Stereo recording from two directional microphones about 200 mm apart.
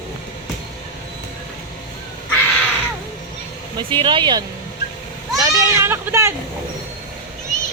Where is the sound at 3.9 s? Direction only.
25° right (ahead or behind).